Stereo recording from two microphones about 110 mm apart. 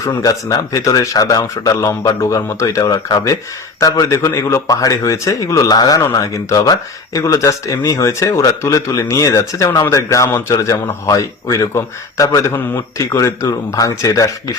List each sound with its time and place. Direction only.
0.0 s a man's voice: 30° left (ahead or behind)